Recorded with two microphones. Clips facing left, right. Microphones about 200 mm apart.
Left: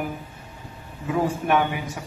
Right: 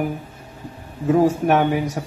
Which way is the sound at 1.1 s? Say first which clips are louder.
Right 6 dB; 40° right (ahead or behind).